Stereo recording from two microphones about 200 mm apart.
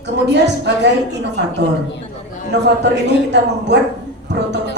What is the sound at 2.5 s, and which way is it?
A woman's voice, 60° right (ahead or behind).